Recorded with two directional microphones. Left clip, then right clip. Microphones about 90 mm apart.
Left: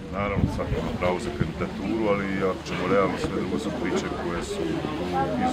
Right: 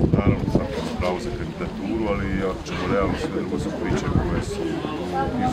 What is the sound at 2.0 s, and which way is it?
Speech, 5° right (ahead or behind).